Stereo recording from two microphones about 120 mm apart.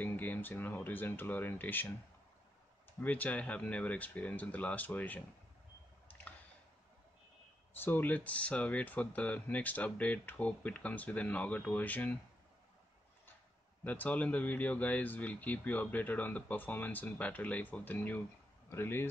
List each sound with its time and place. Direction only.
0.0 s speech: 15° left (ahead or behind)
3.0 s speech: 15° left (ahead or behind)
7.7 s speech: 15° left (ahead or behind)
13.8 s speech: 15° left (ahead or behind)